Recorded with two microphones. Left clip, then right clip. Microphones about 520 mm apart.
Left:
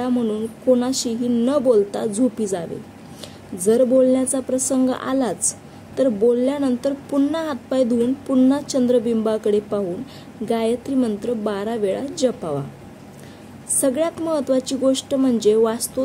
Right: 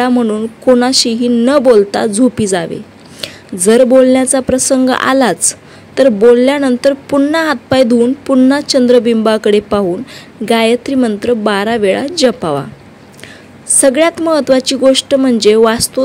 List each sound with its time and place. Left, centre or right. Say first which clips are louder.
0.0 s speech: right 10 dB; left
13.7 s speech: right 11 dB; left